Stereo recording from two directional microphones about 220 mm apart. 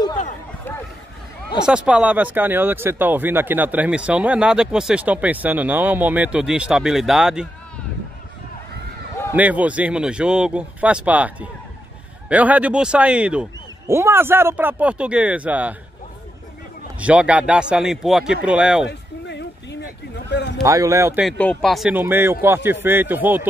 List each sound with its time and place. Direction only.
1.6 s speech: 5° right (ahead or behind)
9.3 s speech: 5° right (ahead or behind)
17.0 s speech: 5° right (ahead or behind)
18.9 s a sound: 50° left (ahead or behind)
20.6 s speech: 15° right (ahead or behind)
21.3 s speech: 5° left (ahead or behind)